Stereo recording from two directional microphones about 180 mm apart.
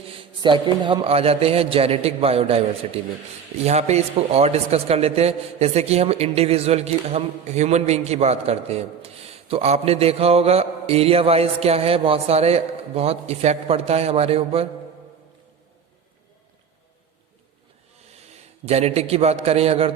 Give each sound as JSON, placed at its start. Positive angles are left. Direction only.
{"t": 0.2, "sound": "a man's voice", "side_deg": -25}
{"t": 17.9, "sound": "a man's voice", "side_deg": -35}